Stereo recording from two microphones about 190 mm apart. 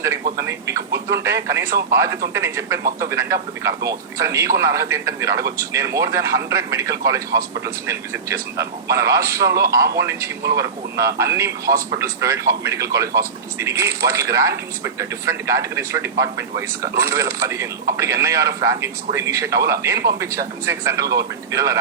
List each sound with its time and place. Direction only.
0.0 s speech: 15° right (ahead or behind)